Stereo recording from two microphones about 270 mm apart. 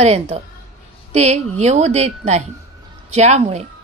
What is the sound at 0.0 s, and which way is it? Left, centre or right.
A woman's voice, right.